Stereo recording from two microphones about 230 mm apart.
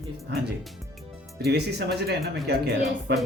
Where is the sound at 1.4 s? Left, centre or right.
Right.